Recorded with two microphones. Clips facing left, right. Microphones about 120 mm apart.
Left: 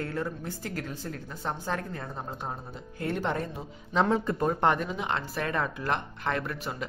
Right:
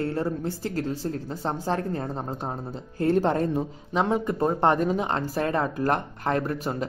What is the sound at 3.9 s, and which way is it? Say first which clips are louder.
Speech: even; 15° right (ahead or behind).